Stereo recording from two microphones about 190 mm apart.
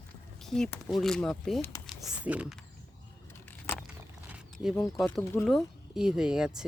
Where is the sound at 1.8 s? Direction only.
5° right (ahead or behind).